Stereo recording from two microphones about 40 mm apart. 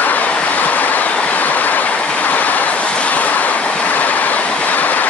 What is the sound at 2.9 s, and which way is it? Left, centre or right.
Vehicle, left.